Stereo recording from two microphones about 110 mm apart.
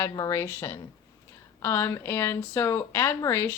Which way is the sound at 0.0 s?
25° left (ahead or behind).